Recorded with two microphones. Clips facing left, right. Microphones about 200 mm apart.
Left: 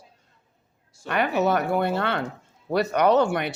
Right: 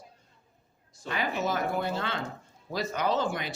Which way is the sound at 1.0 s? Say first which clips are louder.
Left 8 dB; 65° left (ahead or behind).